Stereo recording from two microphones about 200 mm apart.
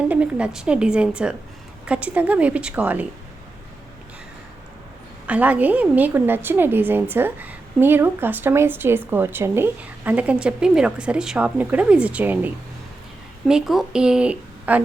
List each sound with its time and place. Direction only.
0.1 s a woman's voice: 5° right (ahead or behind)
5.2 s a woman's voice: 5° right (ahead or behind)
13.5 s a woman's voice: centre (ahead or behind)